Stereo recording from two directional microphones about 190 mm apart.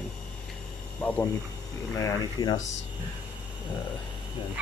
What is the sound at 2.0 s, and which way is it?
Speech, 20° left (ahead or behind).